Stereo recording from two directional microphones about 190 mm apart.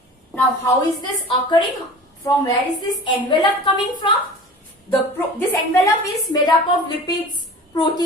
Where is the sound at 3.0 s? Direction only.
25° left (ahead or behind).